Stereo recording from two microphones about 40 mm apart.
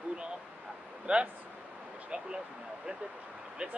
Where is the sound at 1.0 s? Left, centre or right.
Right.